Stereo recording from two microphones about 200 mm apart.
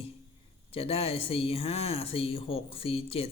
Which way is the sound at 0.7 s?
30° left (ahead or behind).